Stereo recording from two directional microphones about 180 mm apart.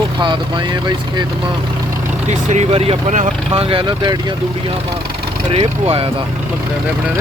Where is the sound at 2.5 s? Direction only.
35° right (ahead or behind).